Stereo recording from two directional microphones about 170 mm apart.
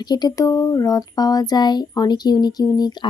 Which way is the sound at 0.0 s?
25° left (ahead or behind).